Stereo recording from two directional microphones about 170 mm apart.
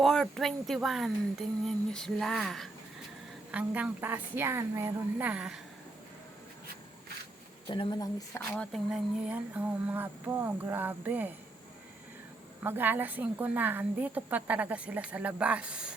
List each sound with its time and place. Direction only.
0.0 s a woman's voice: centre (ahead or behind)
7.7 s speech: 25° left (ahead or behind)
8.5 s a woman's voice: centre (ahead or behind)
12.6 s a woman's voice: 10° right (ahead or behind)